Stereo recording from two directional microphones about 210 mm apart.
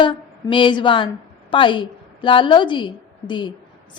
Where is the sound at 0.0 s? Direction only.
25° left (ahead or behind).